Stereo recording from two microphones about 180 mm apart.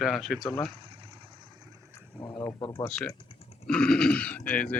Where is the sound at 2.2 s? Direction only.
5° left (ahead or behind).